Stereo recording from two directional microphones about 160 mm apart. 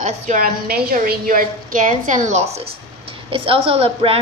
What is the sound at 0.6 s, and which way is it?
A woman's voice, 70° right (ahead or behind).